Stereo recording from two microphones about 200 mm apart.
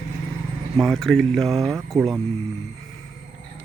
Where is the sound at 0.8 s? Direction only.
Centre (ahead or behind).